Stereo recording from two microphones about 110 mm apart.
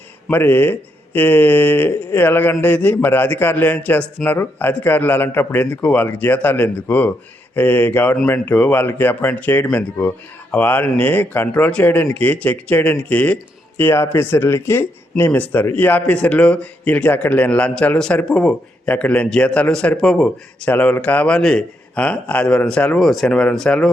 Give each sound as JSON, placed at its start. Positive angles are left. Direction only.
{"t": 0.3, "sound": "speech", "side_deg": 20}